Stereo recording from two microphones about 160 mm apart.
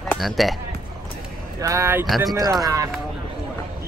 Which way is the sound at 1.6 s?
15° right (ahead or behind).